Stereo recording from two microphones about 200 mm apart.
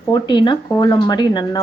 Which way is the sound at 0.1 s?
25° left (ahead or behind).